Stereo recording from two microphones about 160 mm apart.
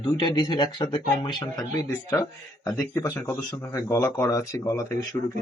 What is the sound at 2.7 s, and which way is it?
Speech, 20° left (ahead or behind).